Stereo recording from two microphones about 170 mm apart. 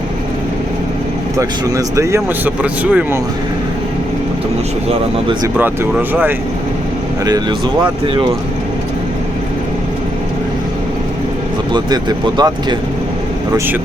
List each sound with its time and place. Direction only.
1.4 s speech: 20° right (ahead or behind)
5.5 s speech: 10° right (ahead or behind)
11.7 s speech: 25° right (ahead or behind)